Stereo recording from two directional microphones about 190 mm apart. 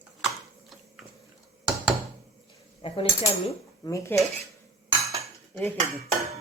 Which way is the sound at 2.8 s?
30° left (ahead or behind).